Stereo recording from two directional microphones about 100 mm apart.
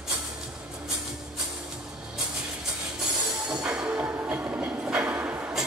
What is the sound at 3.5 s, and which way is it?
Train, 10° right (ahead or behind).